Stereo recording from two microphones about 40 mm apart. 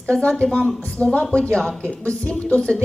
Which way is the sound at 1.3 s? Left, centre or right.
Left.